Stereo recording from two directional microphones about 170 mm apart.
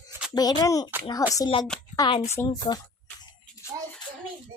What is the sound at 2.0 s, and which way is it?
Speech, 30° left (ahead or behind).